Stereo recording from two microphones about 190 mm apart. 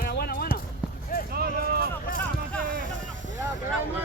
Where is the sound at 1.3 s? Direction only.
55° right (ahead or behind).